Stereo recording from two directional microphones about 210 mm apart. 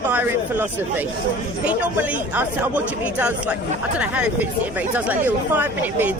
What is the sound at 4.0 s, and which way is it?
Speech, 5° right (ahead or behind).